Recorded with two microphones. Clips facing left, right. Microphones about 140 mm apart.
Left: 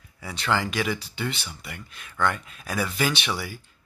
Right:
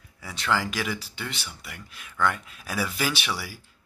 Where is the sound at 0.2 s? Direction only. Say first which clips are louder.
Left 1 dB; centre (ahead or behind).